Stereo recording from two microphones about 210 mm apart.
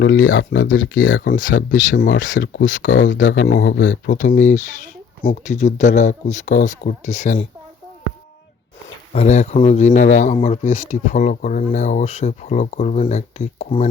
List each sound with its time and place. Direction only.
0.0 s speech: 65° left (ahead or behind)
2.3 s speech: 45° left (ahead or behind)
9.1 s speech: 35° left (ahead or behind)